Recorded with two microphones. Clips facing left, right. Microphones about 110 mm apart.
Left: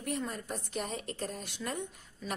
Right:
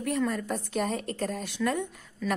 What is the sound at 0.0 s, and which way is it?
A woman's voice, 80° right.